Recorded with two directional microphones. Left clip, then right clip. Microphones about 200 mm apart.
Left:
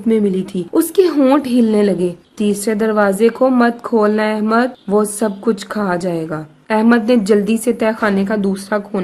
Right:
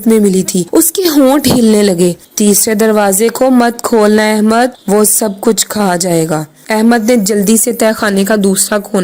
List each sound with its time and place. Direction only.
0.1 s a woman's voice: 30° right (ahead or behind)